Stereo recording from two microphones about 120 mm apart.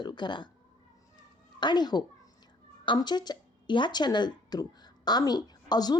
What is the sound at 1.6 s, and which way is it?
A woman's voice, 35° left (ahead or behind).